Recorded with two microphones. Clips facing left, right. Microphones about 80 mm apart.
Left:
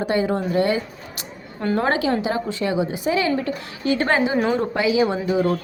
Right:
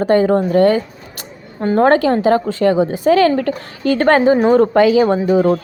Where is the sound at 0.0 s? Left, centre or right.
Right.